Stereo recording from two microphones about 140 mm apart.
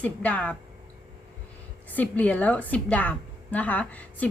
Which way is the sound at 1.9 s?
10° left (ahead or behind).